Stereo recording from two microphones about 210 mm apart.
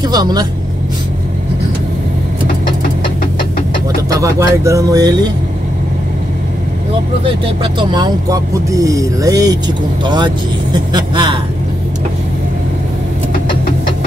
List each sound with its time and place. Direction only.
0.0 s speech: 20° right (ahead or behind)
4.1 s speech: 15° right (ahead or behind)
7.9 s speech: 20° right (ahead or behind)